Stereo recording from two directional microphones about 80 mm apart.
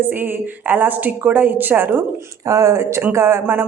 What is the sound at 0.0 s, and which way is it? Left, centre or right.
A woman's voice, right.